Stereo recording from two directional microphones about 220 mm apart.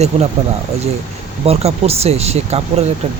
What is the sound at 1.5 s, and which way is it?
Speech, 30° right (ahead or behind).